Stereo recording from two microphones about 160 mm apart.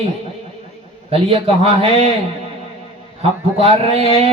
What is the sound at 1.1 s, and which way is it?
Speech, 35° right (ahead or behind).